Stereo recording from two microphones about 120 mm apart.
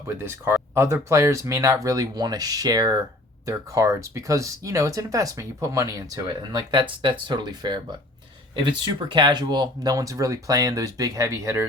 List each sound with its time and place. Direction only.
0.1 s speech: 20° right (ahead or behind)
6.2 s speech: 40° right (ahead or behind)